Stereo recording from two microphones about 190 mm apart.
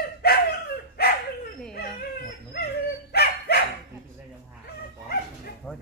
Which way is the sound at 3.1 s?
55° left (ahead or behind).